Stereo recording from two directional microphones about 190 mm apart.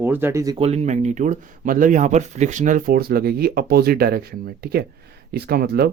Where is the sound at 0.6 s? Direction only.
35° right (ahead or behind).